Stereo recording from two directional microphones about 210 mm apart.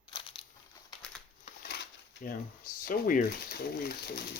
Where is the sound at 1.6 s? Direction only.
50° left (ahead or behind).